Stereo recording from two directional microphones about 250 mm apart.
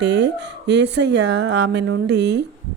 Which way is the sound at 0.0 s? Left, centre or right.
Right.